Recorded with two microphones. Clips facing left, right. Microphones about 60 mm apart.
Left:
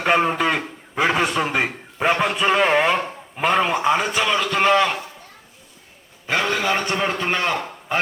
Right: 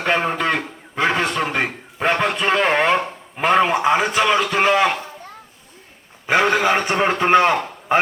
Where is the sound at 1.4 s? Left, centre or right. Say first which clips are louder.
Even; centre.